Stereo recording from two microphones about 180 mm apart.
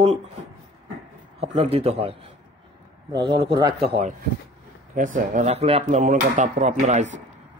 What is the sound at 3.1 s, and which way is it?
Speech, 25° right (ahead or behind).